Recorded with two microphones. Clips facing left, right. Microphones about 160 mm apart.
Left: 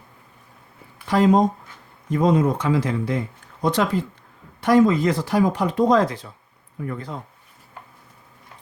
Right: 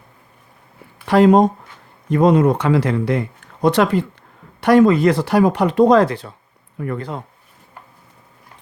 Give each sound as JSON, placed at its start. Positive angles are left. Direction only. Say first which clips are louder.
{"t": 1.0, "sound": "speech", "louder": "right 5 dB", "side_deg": -65}